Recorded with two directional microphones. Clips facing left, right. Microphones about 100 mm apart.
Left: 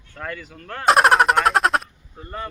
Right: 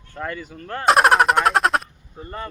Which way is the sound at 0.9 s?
Centre (ahead or behind).